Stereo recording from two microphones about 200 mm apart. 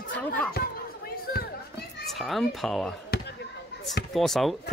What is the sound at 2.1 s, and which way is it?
Speech, centre (ahead or behind).